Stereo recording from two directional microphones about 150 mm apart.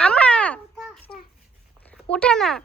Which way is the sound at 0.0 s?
10° left (ahead or behind).